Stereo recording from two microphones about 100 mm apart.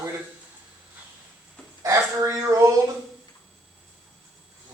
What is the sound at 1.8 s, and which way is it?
Speech, 30° right (ahead or behind).